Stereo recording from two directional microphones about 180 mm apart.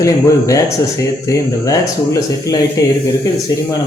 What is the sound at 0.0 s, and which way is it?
Speech, 15° left (ahead or behind).